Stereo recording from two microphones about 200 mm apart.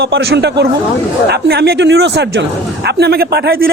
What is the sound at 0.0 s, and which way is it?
A man's voice, 60° right (ahead or behind).